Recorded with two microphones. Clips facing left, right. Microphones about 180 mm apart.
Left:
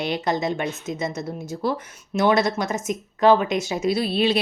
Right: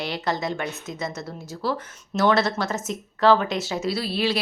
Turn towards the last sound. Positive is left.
turn(degrees=20)  # may be behind; listen again after turning